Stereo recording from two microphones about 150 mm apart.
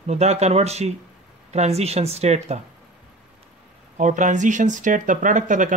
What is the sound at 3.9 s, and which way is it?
Speech, 55° right (ahead or behind).